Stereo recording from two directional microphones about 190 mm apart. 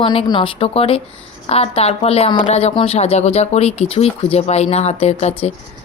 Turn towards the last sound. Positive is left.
turn(degrees=35)  # may be behind; listen again after turning